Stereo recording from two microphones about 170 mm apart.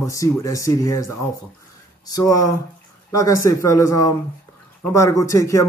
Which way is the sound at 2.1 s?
20° left (ahead or behind).